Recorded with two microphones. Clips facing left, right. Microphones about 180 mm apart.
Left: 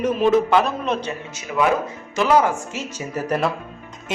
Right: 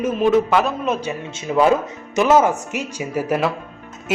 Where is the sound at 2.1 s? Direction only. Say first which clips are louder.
Right 3 dB; 20° right (ahead or behind).